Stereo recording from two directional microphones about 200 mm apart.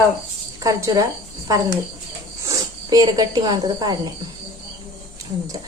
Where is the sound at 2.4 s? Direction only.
15° right (ahead or behind).